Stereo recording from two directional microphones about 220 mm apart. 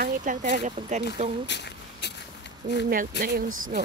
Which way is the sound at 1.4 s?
50° left (ahead or behind).